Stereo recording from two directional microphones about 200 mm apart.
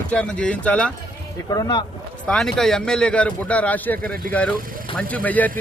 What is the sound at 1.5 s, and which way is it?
Speech, 20° left (ahead or behind).